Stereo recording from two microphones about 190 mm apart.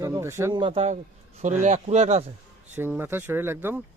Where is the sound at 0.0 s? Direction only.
15° right (ahead or behind).